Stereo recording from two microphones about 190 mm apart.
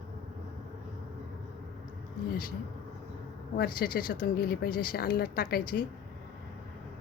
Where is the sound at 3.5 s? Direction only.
50° left (ahead or behind).